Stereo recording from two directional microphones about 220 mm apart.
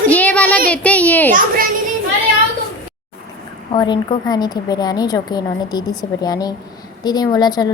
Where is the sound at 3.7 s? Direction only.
20° left (ahead or behind).